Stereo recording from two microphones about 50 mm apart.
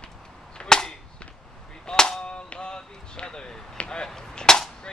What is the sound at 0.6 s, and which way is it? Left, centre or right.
Cap gun, centre.